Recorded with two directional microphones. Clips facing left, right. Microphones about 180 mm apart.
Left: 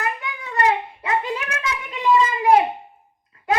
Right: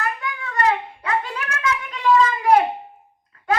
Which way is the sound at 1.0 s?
20° left (ahead or behind).